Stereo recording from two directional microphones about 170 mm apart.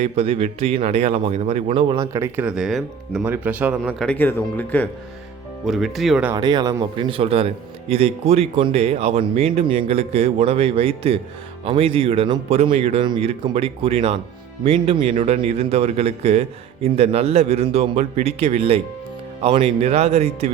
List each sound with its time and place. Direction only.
0.0 s a man's voice: 35° right (ahead or behind); by 3.2 s centre (ahead or behind)
3.2 s speech: 10° right (ahead or behind)
4.0 s speech: 10° left (ahead or behind)
6.3 s a man's voice: 25° right (ahead or behind)